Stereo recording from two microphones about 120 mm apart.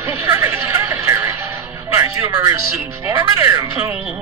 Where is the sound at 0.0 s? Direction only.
20° right (ahead or behind).